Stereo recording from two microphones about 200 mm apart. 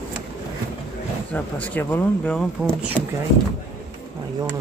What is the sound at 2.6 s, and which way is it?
Speech, 5° right (ahead or behind).